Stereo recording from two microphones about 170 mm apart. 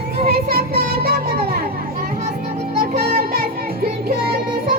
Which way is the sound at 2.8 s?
60° right (ahead or behind).